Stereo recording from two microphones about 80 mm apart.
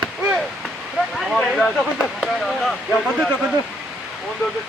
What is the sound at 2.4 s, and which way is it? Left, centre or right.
Speech, centre.